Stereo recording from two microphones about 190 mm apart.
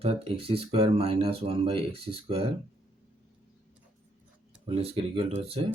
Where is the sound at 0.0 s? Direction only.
30° right (ahead or behind).